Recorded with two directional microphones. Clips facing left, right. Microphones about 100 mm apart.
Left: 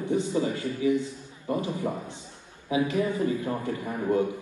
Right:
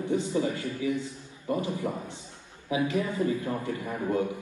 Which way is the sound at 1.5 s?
25° left (ahead or behind).